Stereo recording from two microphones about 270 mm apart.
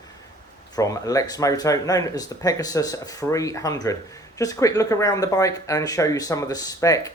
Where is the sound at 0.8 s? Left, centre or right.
Centre.